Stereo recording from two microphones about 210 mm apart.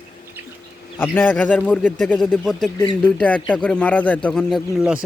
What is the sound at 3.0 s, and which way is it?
Speech, 5° left (ahead or behind).